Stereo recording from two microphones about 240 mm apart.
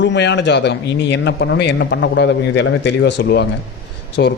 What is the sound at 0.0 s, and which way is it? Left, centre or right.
A man's voice, left.